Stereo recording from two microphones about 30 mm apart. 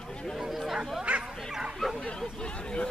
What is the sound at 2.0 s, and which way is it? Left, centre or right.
Hubbub, left.